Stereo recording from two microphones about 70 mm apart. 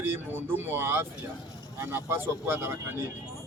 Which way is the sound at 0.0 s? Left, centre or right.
Right.